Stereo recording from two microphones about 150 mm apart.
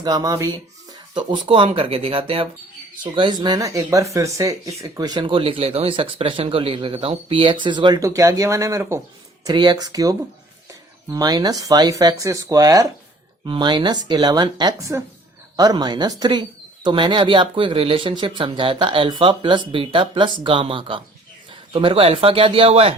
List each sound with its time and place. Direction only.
0.0 s speech: 25° right (ahead or behind)
9.4 s speech: 30° right (ahead or behind)